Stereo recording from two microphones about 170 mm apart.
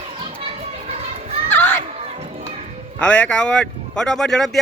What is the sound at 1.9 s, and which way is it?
Crowd, 35° right (ahead or behind).